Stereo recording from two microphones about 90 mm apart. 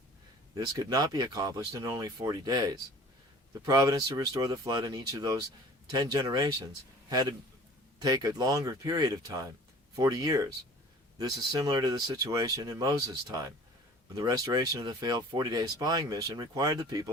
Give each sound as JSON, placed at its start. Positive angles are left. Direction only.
{"t": 0.5, "sound": "speech", "side_deg": -40}